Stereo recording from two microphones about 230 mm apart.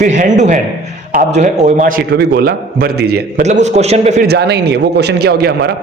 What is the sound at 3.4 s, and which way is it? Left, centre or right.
Speech, right.